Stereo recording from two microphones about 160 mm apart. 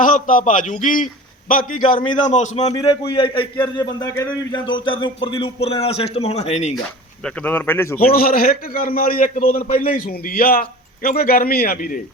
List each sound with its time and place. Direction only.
0.0 s a man's voice: 55° left (ahead or behind)
2.3 s a man's voice: 45° left (ahead or behind)
2.7 s a man's voice: 30° left (ahead or behind)
4.6 s speech: 30° left (ahead or behind)
7.3 s speech: 10° left (ahead or behind)
7.9 s a man's voice: 65° left (ahead or behind)